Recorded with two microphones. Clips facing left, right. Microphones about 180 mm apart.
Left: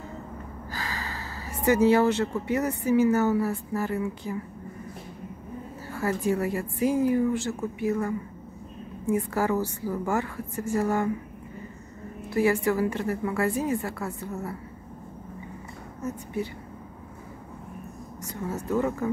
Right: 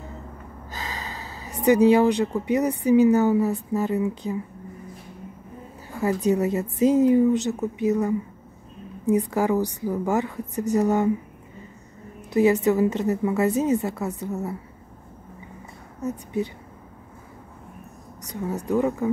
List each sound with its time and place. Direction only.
0.7 s speech: 20° right (ahead or behind)
5.9 s a woman's voice: 15° right (ahead or behind)
12.3 s a woman's voice: 20° right (ahead or behind)
16.0 s speech: 20° right (ahead or behind)
18.2 s speech: 15° right (ahead or behind)